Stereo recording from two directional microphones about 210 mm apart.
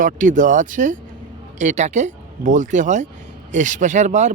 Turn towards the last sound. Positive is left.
turn(degrees=-35)  # may be behind; listen again after turning